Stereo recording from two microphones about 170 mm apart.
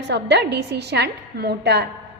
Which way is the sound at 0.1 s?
90° right.